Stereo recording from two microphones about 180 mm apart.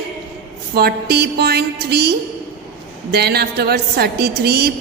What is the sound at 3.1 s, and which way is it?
A woman's voice, 60° right (ahead or behind).